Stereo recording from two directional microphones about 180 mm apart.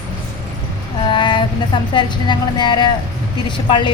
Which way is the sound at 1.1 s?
25° left (ahead or behind).